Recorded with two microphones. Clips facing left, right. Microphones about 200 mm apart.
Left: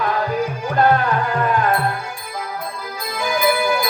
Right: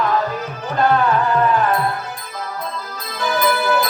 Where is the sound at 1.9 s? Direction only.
10° left (ahead or behind).